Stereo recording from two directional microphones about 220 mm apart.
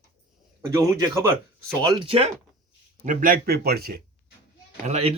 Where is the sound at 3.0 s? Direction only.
35° right (ahead or behind).